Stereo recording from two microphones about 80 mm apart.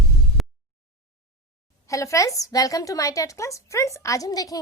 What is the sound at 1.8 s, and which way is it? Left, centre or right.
A woman's voice, left.